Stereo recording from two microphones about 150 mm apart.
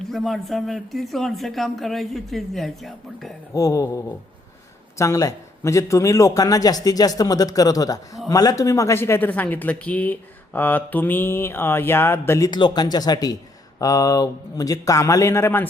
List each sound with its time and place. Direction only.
0.0 s speech: centre (ahead or behind)
3.5 s a man's voice: 20° left (ahead or behind)
12.5 s a man's voice: 30° left (ahead or behind)